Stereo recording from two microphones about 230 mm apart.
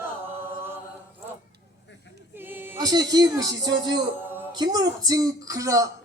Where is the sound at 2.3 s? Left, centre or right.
Centre.